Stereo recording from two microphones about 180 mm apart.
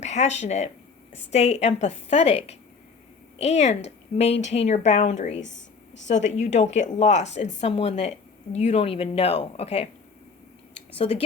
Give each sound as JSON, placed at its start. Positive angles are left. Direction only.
{"t": 0.0, "sound": "a woman's voice", "side_deg": 40}
{"t": 5.4, "sound": "a sound", "side_deg": 90}
{"t": 6.1, "sound": "a woman's voice", "side_deg": 40}
{"t": 10.9, "sound": "a woman's voice", "side_deg": 35}